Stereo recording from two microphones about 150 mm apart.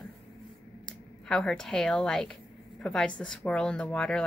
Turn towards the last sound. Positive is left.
turn(degrees=10)  # may be behind; listen again after turning